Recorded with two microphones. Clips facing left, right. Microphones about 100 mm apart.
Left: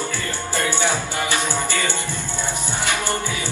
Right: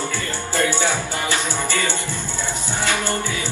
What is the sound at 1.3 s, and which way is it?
Music, 15° left (ahead or behind).